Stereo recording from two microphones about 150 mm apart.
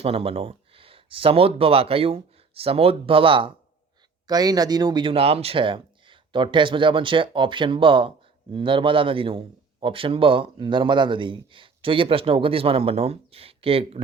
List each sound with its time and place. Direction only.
0.0 s a man's voice: 40° right (ahead or behind)